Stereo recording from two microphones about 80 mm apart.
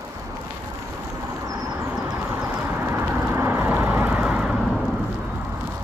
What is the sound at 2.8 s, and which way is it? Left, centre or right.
Vehicle, right.